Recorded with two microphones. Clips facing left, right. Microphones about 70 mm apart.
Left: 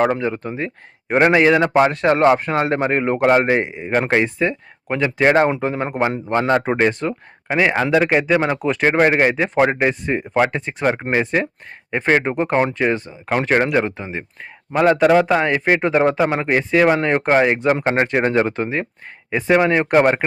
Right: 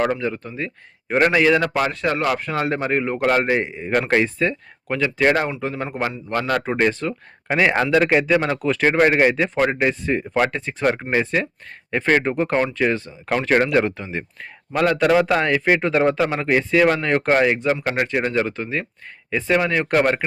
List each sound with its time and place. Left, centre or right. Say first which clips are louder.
0.1 s a man's voice: left 3 dB; left
7.4 s a man's voice: left 1 dB; centre; by 20.2 s left